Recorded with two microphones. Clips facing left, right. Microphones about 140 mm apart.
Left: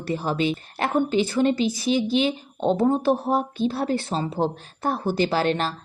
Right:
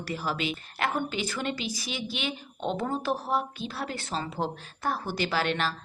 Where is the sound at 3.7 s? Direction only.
30° left (ahead or behind).